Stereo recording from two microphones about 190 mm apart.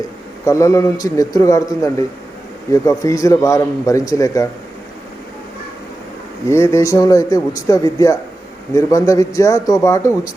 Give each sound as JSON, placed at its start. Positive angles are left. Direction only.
{"t": 0.4, "sound": "speech", "side_deg": 15}
{"t": 6.5, "sound": "speech", "side_deg": 15}